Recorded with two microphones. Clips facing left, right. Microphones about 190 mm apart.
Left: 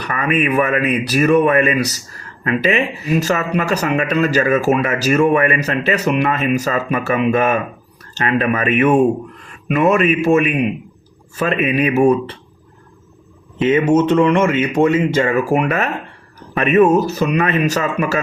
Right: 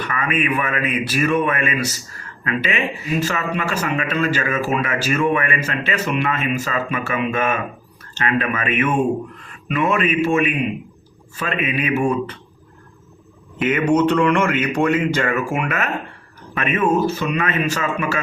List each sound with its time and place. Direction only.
0.0 s speech: 40° left (ahead or behind)
13.6 s speech: 25° left (ahead or behind)